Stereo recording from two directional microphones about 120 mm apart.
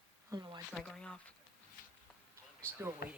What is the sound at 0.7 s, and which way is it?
Speech, 5° left (ahead or behind).